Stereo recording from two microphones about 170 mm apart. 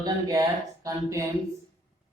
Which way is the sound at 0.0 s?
20° right (ahead or behind).